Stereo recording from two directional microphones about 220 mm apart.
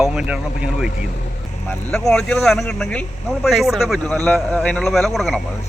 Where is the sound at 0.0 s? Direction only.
5° right (ahead or behind).